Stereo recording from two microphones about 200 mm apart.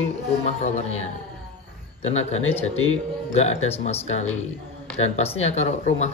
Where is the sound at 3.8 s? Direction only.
35° left (ahead or behind).